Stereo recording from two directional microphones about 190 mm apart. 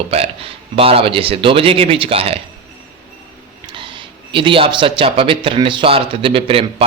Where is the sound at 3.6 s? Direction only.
25° right (ahead or behind).